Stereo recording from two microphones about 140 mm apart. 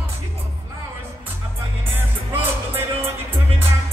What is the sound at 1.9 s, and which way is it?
Music, 15° right (ahead or behind).